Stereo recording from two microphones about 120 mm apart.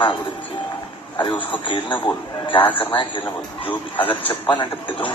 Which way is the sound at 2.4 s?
45° left (ahead or behind).